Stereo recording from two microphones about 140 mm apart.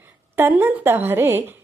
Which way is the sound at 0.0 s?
15° right (ahead or behind).